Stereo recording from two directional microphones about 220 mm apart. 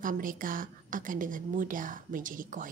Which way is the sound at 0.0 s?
40° right (ahead or behind).